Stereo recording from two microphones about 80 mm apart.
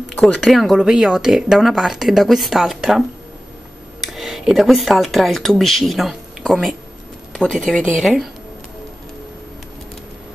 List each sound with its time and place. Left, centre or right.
0.2 s speech: centre
0.5 s speech: centre
4.0 s speech: centre
7.4 s speech: centre
8.0 s speech: centre